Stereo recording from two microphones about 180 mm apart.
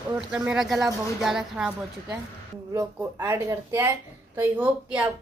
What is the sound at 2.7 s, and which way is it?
A woman's voice, 15° right (ahead or behind).